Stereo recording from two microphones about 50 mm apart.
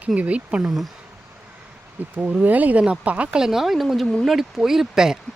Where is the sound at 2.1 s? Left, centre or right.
Right.